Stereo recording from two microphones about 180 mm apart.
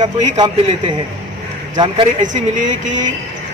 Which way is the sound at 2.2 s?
45° right (ahead or behind).